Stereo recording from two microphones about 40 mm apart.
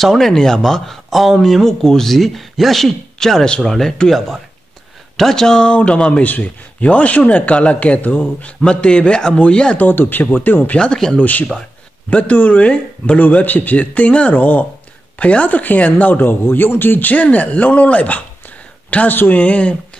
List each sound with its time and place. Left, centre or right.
0.0 s speech: centre
0.8 s speech: centre
5.1 s speech: centre; by 6.2 s left
6.2 s a man's voice: left
8.5 s speech: left
9.8 s speech: left
10.6 s speech: left
11.1 s a man's voice: left
13.3 s a man's voice: left
15.1 s speech: left
17.1 s a man's voice: left
19.0 s speech: left
19.4 s a man's voice: left